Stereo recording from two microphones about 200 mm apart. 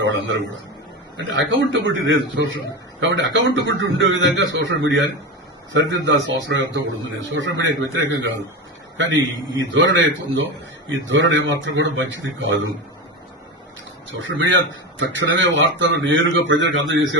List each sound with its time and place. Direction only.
0.0 s a man's voice: 70° right (ahead or behind)
14.2 s speech: 70° right (ahead or behind)